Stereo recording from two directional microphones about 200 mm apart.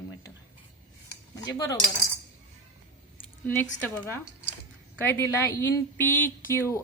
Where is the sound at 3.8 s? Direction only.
10° left (ahead or behind).